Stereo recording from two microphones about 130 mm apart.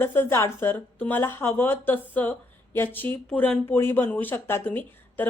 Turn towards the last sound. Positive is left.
turn(degrees=15)  # may be behind; listen again after turning